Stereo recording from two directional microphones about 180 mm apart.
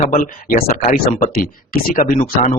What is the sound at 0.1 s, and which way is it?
Speech, 50° left (ahead or behind).